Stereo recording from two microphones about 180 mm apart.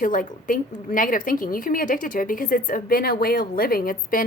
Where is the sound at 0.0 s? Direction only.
50° left (ahead or behind).